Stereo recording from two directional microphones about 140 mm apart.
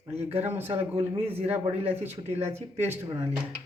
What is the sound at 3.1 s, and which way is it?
Speech, 30° right (ahead or behind).